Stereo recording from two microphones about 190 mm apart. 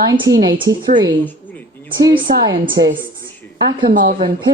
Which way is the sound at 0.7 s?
20° right (ahead or behind).